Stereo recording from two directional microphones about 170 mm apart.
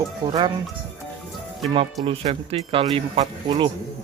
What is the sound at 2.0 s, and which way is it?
Speech, 35° right (ahead or behind).